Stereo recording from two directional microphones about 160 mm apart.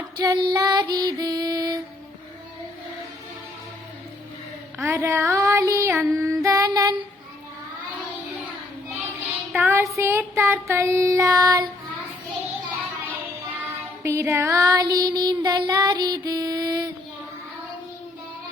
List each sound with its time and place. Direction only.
0.2 s female singing: 25° right (ahead or behind)
4.8 s female singing: 15° right (ahead or behind)
9.6 s child singing: 15° right (ahead or behind)
14.0 s child singing: 15° right (ahead or behind)